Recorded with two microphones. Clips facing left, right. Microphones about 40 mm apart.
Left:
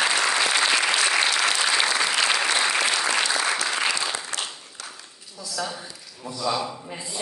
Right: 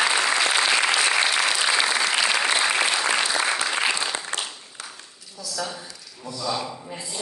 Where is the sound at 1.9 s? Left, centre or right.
Centre.